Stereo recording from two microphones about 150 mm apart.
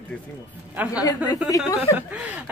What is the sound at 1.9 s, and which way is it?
Speech, 10° right (ahead or behind).